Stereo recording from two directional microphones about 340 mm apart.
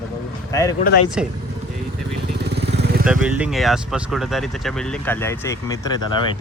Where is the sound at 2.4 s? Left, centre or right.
Right.